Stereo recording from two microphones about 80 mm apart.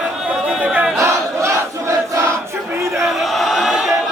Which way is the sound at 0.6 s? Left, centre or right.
Centre.